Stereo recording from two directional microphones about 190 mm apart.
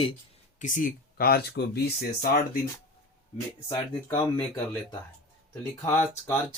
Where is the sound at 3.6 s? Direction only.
15° left (ahead or behind).